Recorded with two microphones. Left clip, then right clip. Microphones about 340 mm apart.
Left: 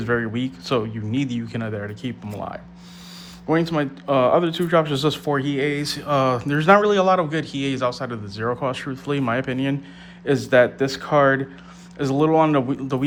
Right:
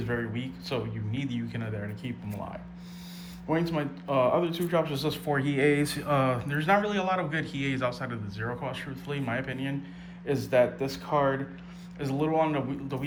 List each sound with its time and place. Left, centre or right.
0.0 s speech: centre
3.5 s speech: centre